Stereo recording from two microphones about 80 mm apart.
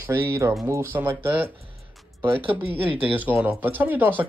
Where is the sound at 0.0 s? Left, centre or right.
Right.